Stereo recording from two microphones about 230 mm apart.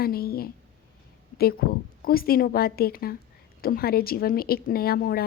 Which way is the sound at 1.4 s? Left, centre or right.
Left.